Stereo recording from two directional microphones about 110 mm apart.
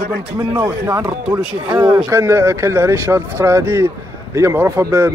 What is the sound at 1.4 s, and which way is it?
A man's voice, 15° right (ahead or behind).